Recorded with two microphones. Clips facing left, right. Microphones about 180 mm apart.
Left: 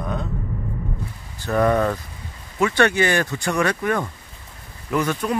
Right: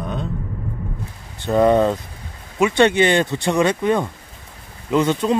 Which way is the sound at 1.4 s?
20° right (ahead or behind).